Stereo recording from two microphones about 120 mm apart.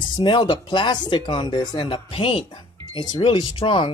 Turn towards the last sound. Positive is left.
turn(degrees=45)  # may be behind; listen again after turning